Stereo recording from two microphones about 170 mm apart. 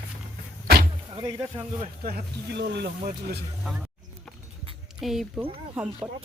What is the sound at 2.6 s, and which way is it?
Speech, 75° right (ahead or behind).